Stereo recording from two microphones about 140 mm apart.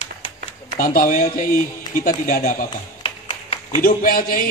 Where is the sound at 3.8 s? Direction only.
90° left.